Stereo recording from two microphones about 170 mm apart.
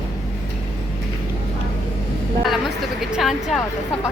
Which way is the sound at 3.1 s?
Centre (ahead or behind).